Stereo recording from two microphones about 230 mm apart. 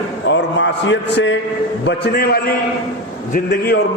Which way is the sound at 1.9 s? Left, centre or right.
Left.